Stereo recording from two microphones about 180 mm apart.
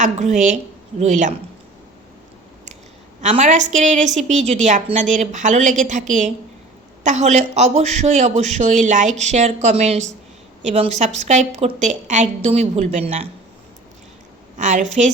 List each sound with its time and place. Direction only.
0.0 s a man's voice: 40° right (ahead or behind)
3.2 s a woman's voice: 40° right (ahead or behind)
14.6 s a woman's voice: 40° right (ahead or behind)